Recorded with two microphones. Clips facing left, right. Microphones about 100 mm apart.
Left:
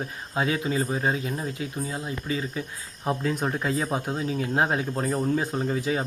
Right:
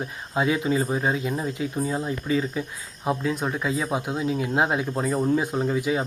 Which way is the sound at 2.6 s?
5° right (ahead or behind).